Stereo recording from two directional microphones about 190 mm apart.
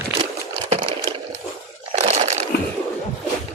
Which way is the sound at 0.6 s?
30° right (ahead or behind).